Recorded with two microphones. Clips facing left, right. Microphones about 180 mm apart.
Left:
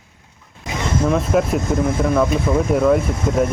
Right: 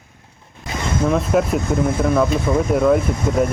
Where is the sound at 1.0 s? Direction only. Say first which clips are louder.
Even; centre (ahead or behind).